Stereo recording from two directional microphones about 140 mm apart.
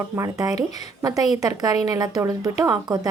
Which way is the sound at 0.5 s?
55° left (ahead or behind).